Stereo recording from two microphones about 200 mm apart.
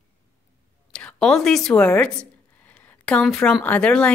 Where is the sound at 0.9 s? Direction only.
5° left (ahead or behind).